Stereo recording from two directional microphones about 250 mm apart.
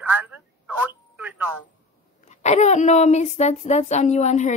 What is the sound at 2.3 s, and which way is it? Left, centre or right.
Speech, left.